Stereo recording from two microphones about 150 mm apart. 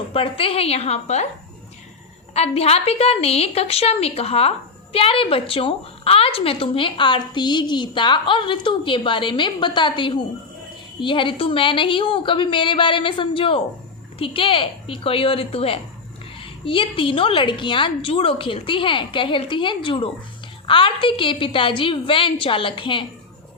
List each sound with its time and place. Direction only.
0.1 s a woman's voice: 40° left (ahead or behind)
2.3 s a woman's voice: 45° left (ahead or behind)